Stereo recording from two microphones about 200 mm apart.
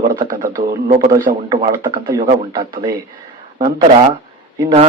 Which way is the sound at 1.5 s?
20° right (ahead or behind).